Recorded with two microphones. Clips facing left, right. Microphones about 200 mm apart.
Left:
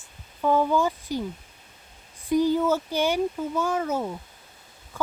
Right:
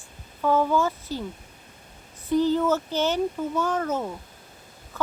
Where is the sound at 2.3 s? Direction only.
10° left (ahead or behind).